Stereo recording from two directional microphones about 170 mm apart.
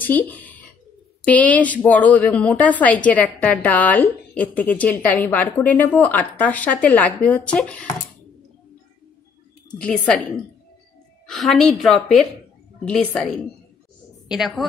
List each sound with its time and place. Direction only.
0.0 s a woman's voice: 10° left (ahead or behind)
9.8 s a woman's voice: 5° left (ahead or behind)